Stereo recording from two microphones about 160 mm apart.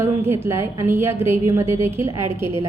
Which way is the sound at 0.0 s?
15° right (ahead or behind).